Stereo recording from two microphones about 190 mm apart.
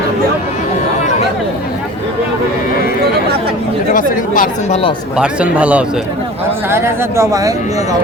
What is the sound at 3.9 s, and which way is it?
Speech, 45° left (ahead or behind).